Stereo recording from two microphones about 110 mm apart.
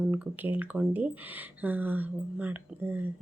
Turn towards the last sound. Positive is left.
turn(degrees=-15)  # may be behind; listen again after turning